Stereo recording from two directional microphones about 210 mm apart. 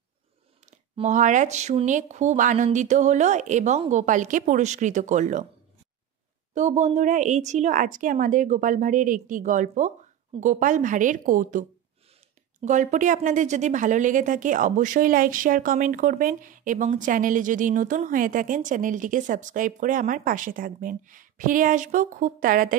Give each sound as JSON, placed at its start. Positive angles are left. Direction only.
{"t": 0.7, "sound": "a woman's voice", "side_deg": -35}
{"t": 6.5, "sound": "a woman's voice", "side_deg": -35}